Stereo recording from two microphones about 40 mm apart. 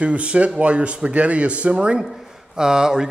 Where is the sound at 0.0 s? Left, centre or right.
Right.